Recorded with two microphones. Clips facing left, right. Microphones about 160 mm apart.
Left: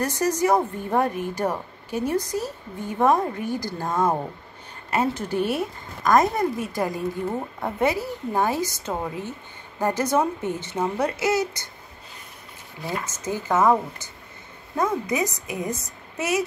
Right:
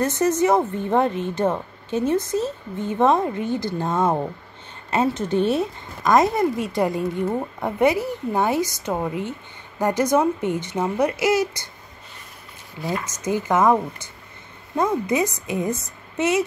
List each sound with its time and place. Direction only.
0.0 s speech: 25° right (ahead or behind)
13.2 s speech: 15° right (ahead or behind)
14.8 s speech: 25° right (ahead or behind)